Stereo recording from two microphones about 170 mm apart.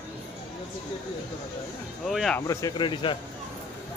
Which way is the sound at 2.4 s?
20° left (ahead or behind).